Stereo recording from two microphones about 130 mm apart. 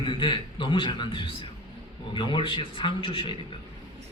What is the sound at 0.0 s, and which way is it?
A woman's voice, 40° left (ahead or behind).